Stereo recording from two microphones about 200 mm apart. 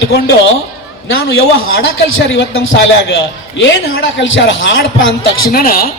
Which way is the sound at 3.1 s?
65° left (ahead or behind).